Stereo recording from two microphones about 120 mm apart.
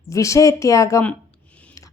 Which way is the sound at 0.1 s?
25° left (ahead or behind).